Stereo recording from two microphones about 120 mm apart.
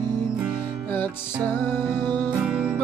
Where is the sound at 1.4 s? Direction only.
20° left (ahead or behind).